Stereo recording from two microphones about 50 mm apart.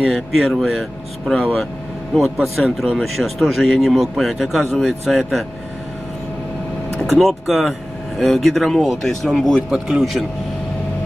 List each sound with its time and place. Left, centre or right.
0.0 s a man's voice: centre
7.1 s a man's voice: centre